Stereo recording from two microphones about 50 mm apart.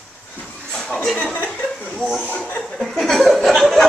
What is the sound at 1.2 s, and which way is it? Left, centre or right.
Chuckle, left.